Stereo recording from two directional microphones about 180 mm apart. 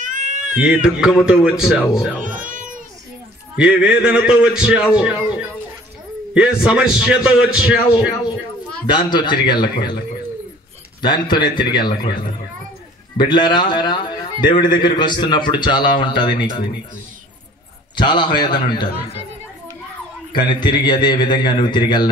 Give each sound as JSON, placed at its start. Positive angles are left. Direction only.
{"t": 0.0, "sound": "cat", "side_deg": -45}
{"t": 0.6, "sound": "a man's voice", "side_deg": -5}
{"t": 2.2, "sound": "a sound", "side_deg": -50}
{"t": 3.5, "sound": "a man's voice", "side_deg": -5}
{"t": 8.8, "sound": "a man's voice", "side_deg": 25}
{"t": 11.0, "sound": "a man's voice", "side_deg": 25}
{"t": 17.9, "sound": "a man's voice", "side_deg": 25}
{"t": 20.3, "sound": "a man's voice", "side_deg": 25}